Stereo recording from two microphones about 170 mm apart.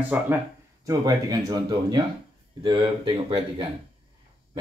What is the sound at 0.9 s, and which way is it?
Speech, 20° right (ahead or behind).